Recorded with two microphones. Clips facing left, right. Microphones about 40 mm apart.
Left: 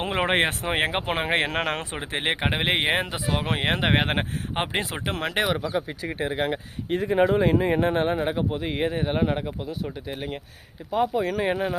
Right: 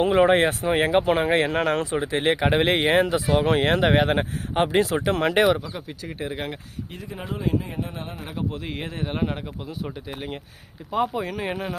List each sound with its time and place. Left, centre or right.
0.0 s speech: left
2.5 s speech: centre
3.8 s speech: left
4.5 s speech: left
5.1 s speech: centre
5.7 s speech: left
6.9 s speech: left
8.4 s speech: centre
10.1 s speech: centre